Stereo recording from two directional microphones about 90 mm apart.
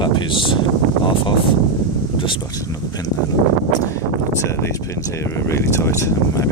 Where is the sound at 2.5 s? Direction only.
45° left (ahead or behind).